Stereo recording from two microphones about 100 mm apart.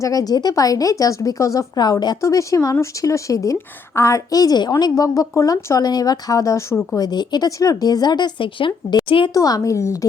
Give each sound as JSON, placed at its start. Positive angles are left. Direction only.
{"t": 0.0, "sound": "a woman's voice", "side_deg": 35}
{"t": 2.2, "sound": "a woman's voice", "side_deg": 35}
{"t": 9.3, "sound": "a woman's voice", "side_deg": 35}